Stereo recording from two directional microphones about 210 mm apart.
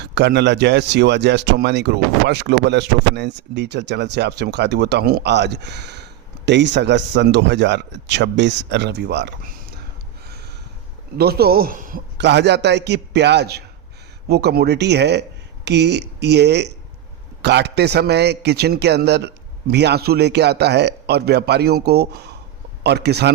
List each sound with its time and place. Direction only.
0.0 s speech: 55° right (ahead or behind)
10.2 s a sound: 50° right (ahead or behind)
11.2 s a man's voice: 50° right (ahead or behind)